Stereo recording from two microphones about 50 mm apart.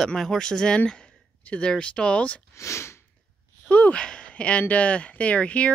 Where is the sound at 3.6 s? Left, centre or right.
Left.